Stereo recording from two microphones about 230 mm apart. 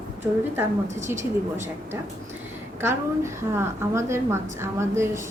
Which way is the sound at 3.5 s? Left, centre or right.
Centre.